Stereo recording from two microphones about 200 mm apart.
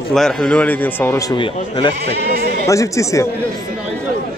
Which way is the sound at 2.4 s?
50° right (ahead or behind).